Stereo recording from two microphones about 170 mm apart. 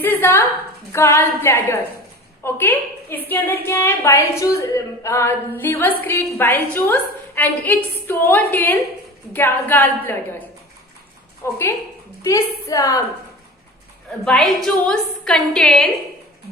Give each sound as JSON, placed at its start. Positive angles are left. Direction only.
{"t": 0.0, "sound": "a sound", "side_deg": 10}
{"t": 0.9, "sound": "a woman's voice", "side_deg": 15}
{"t": 11.4, "sound": "a woman's voice", "side_deg": 15}
{"t": 14.3, "sound": "a woman's voice", "side_deg": 5}